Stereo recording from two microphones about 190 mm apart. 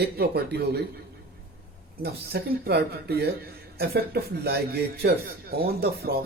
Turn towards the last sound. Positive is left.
turn(degrees=-55)  # may be behind; listen again after turning